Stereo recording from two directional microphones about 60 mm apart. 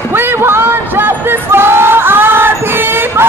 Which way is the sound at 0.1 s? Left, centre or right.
Right.